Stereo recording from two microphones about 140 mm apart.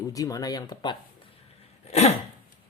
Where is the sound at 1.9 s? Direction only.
50° left (ahead or behind).